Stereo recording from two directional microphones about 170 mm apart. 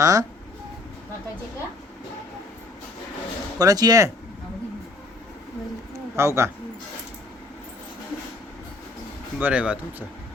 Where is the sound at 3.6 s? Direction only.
20° right (ahead or behind).